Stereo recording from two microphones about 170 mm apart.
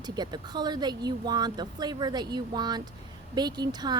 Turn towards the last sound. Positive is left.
turn(degrees=-25)  # may be behind; listen again after turning